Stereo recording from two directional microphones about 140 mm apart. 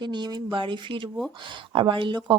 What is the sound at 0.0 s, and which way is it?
A woman's voice, 35° right (ahead or behind).